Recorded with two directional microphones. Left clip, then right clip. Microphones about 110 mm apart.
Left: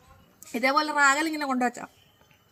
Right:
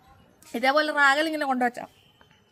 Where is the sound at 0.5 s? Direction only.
20° right (ahead or behind).